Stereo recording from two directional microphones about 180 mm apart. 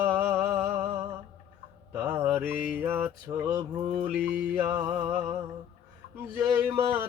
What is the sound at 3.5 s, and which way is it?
Mantra, 25° right (ahead or behind).